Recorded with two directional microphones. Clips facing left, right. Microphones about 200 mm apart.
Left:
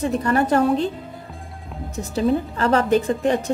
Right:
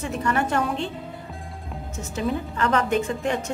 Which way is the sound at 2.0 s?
35° left (ahead or behind).